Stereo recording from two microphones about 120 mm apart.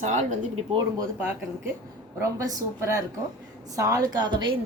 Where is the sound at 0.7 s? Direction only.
35° right (ahead or behind).